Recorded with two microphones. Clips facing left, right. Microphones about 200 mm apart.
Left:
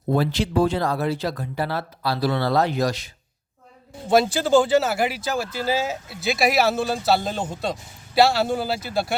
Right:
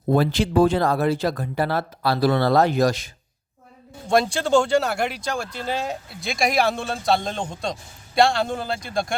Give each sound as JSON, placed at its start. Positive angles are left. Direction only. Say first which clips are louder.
{"t": 0.1, "sound": "speech", "louder": "right 2 dB", "side_deg": -50}
{"t": 4.0, "sound": "speech", "louder": "left 2 dB", "side_deg": 5}